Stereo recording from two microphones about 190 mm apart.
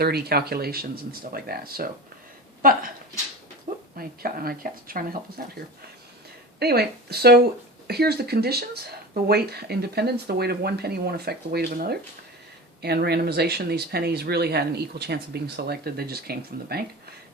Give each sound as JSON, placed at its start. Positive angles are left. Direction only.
{"t": 0.0, "sound": "speech", "side_deg": -55}
{"t": 3.9, "sound": "speech", "side_deg": -50}
{"t": 6.6, "sound": "speech", "side_deg": -55}